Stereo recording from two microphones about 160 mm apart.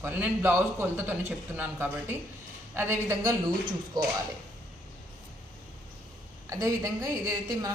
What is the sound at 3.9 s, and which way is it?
Speech, 25° right (ahead or behind).